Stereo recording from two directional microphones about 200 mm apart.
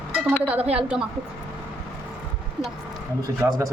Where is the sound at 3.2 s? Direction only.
15° right (ahead or behind).